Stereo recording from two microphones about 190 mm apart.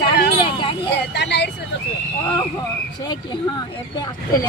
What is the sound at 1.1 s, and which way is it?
Speech, 65° left (ahead or behind).